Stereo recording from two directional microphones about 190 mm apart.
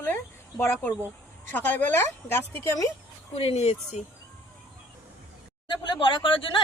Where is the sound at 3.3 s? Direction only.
30° left (ahead or behind).